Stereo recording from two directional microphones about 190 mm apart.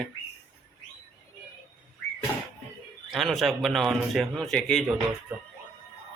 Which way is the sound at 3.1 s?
Centre (ahead or behind).